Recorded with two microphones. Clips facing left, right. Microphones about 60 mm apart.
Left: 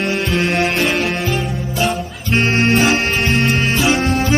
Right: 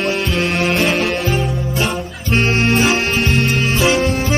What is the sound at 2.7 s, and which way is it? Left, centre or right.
Music, centre.